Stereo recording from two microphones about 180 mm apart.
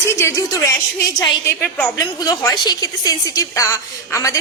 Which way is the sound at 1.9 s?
20° left (ahead or behind).